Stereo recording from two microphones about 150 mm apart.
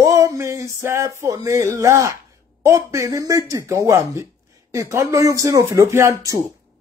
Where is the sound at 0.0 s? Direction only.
20° right (ahead or behind).